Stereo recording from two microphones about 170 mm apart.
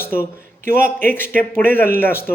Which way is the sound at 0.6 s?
55° right (ahead or behind).